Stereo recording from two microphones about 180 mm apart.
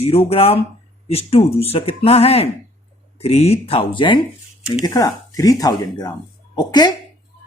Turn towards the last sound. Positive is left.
turn(degrees=25)  # may be behind; listen again after turning